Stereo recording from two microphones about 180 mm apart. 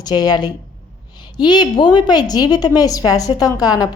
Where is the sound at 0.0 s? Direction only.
20° left (ahead or behind).